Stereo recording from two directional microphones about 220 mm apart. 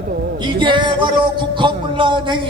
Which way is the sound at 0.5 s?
20° right (ahead or behind).